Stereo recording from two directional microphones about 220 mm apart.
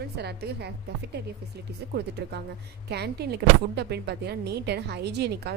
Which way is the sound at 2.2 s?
45° right (ahead or behind).